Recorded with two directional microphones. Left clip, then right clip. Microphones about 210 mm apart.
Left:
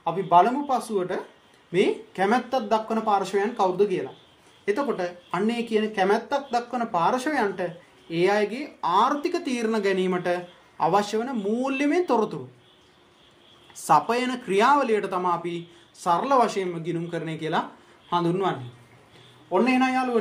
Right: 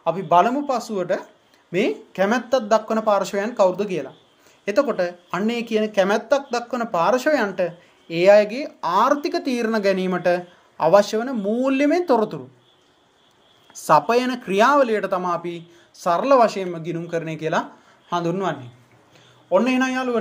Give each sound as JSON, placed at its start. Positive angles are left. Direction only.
{"t": 0.0, "sound": "speech", "side_deg": -50}
{"t": 13.8, "sound": "speech", "side_deg": -45}
{"t": 19.5, "sound": "speech", "side_deg": -50}